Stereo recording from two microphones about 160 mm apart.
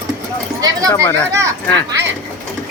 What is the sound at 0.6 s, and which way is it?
Speech, 25° right (ahead or behind).